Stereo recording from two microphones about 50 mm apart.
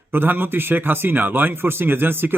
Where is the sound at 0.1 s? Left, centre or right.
Right.